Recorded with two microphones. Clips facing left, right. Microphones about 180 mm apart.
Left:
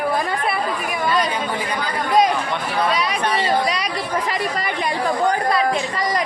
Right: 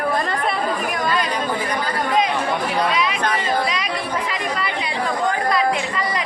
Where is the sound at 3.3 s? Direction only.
35° left (ahead or behind).